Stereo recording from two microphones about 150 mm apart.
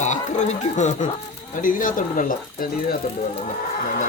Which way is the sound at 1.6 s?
65° left (ahead or behind).